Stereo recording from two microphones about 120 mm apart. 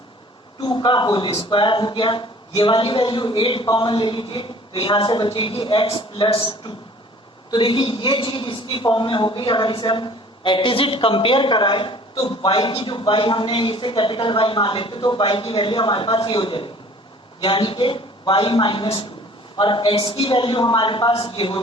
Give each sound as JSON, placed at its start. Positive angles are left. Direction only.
{"t": 0.6, "sound": "a man's voice", "side_deg": 40}